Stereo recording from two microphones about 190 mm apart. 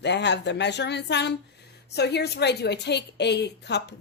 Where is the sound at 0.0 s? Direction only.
65° left (ahead or behind).